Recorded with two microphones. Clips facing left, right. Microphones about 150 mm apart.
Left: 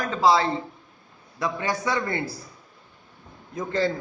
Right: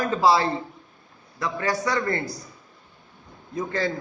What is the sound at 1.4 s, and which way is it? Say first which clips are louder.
Speech: right 1 dB; 15° left (ahead or behind).